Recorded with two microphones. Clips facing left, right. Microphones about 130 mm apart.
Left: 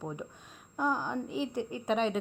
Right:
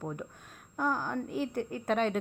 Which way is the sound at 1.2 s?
50° right (ahead or behind).